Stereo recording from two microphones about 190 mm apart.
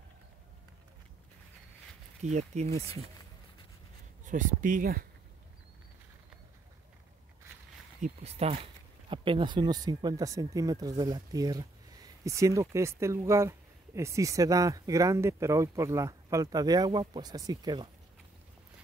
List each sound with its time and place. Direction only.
2.2 s speech: 35° right (ahead or behind)
4.2 s speech: 45° right (ahead or behind)
8.0 s speech: 35° right (ahead or behind)